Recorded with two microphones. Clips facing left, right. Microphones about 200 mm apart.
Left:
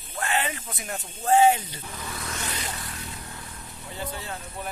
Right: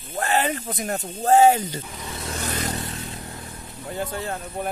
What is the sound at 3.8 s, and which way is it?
Speech, 50° right (ahead or behind).